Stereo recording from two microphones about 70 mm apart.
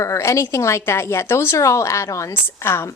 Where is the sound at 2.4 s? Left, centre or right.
Left.